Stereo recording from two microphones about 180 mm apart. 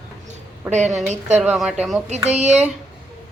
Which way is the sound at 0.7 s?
40° right (ahead or behind).